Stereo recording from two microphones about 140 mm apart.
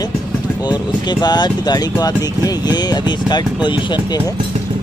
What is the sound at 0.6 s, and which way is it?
Speech, 30° left (ahead or behind).